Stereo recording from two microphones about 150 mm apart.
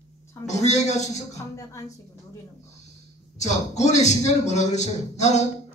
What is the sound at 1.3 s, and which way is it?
Speech, 20° left (ahead or behind).